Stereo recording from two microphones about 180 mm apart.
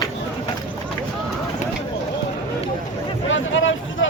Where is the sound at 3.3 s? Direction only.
90° left.